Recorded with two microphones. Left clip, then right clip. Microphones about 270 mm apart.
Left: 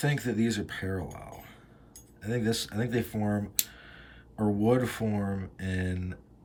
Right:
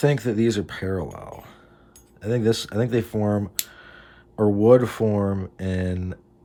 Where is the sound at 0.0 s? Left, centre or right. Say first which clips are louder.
Right 9 dB; centre.